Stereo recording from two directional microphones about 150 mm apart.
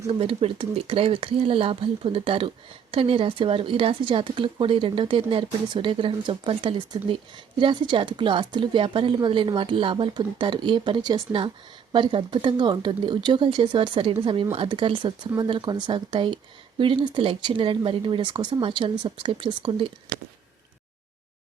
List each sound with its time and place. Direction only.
0.1 s a woman's voice: 40° right (ahead or behind)